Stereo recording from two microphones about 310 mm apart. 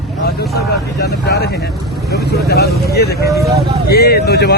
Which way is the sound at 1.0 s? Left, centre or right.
Left.